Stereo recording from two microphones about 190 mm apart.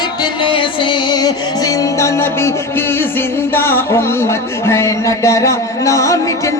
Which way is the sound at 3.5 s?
10° left (ahead or behind).